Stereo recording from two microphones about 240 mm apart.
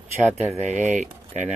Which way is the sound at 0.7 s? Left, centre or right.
Right.